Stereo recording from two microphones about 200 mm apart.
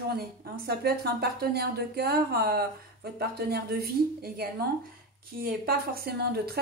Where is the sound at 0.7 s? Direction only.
50° right (ahead or behind).